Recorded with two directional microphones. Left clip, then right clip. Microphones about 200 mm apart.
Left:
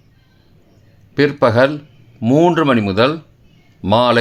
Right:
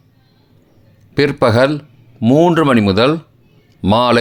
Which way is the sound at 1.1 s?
20° right (ahead or behind).